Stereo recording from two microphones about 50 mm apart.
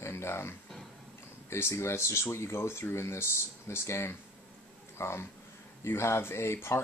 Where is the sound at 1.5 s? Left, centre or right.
Left.